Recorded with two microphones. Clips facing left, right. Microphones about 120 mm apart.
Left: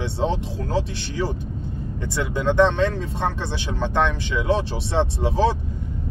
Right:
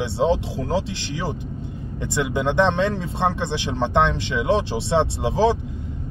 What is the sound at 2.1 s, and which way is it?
Speech, 20° right (ahead or behind).